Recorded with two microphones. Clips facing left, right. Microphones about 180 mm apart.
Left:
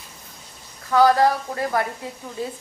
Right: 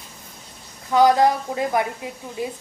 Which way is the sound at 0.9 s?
15° right (ahead or behind).